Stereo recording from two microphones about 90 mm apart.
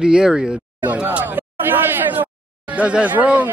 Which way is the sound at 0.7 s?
20° right (ahead or behind).